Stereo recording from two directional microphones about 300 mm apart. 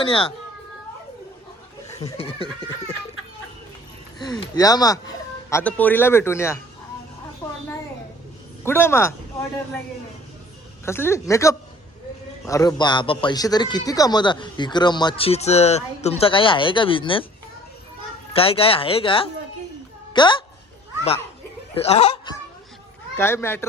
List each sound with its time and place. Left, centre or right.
0.0 s a man's voice: centre
2.0 s a man's voice: centre
4.5 s a man's voice: centre
8.6 s a man's voice: centre
10.8 s a man's voice: centre
18.3 s a man's voice: centre
21.8 s speech: left
23.1 s a man's voice: centre